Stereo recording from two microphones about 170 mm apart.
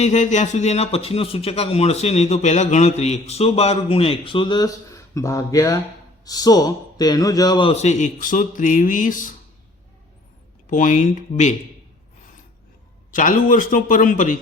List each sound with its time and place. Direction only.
0.0 s a man's voice: 45° left (ahead or behind)
10.7 s a man's voice: 45° left (ahead or behind)
13.1 s a man's voice: 50° left (ahead or behind)